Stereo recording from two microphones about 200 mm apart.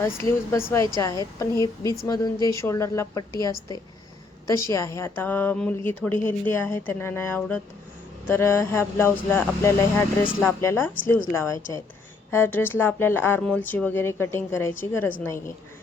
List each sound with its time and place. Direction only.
0.0 s a woman's voice: 10° left (ahead or behind)
4.4 s a woman's voice: 15° left (ahead or behind)